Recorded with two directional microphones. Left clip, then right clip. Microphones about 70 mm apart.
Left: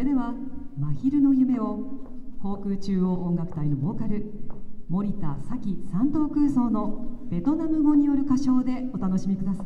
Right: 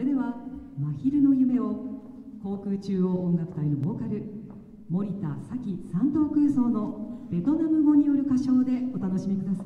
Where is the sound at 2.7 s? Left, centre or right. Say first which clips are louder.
Right 1 dB; left.